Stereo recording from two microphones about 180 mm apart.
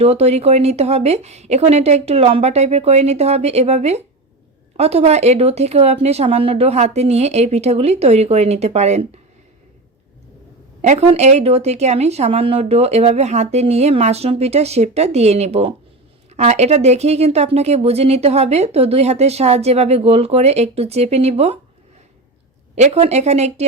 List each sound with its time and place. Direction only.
0.0 s speech: 35° right (ahead or behind)
10.8 s speech: 35° right (ahead or behind)
22.7 s speech: 35° right (ahead or behind)